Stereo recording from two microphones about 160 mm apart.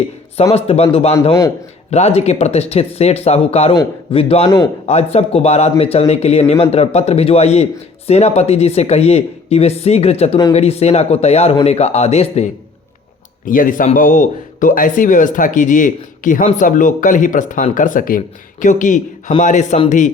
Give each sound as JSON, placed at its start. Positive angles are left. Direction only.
{"t": 0.5, "sound": "a man's voice", "side_deg": 40}
{"t": 4.4, "sound": "a man's voice", "side_deg": 20}
{"t": 4.9, "sound": "a man's voice", "side_deg": 40}
{"t": 13.4, "sound": "speech", "side_deg": 60}